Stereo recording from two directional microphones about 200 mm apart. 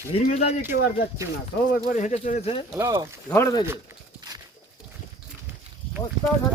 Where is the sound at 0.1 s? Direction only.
30° left (ahead or behind).